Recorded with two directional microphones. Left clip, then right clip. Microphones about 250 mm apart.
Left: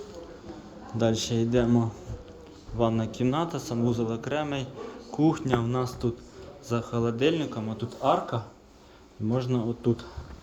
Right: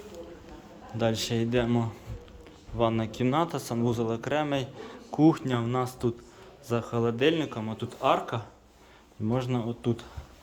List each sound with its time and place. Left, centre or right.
0.9 s speech: centre